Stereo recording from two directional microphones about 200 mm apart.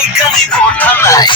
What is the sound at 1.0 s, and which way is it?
Speech, 15° left (ahead or behind).